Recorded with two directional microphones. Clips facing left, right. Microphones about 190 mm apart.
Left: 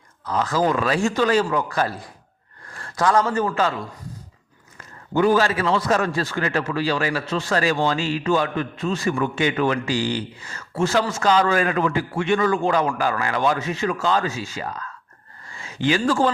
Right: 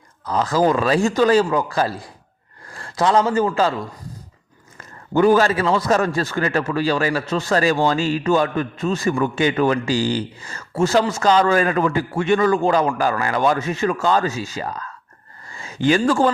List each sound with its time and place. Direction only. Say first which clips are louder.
0.3 s a man's voice: right 3 dB; 35° right (ahead or behind)
5.1 s a man's voice: right 3 dB; 45° right (ahead or behind)